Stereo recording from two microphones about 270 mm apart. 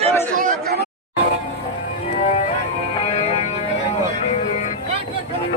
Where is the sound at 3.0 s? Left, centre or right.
Left.